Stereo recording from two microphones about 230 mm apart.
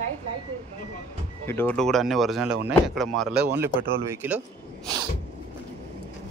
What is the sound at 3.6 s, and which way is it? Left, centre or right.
Speech, centre.